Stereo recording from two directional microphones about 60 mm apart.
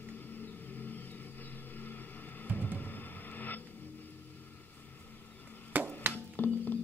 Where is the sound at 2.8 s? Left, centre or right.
Left.